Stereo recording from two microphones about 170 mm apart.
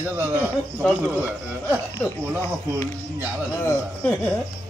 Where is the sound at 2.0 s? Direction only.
10° left (ahead or behind).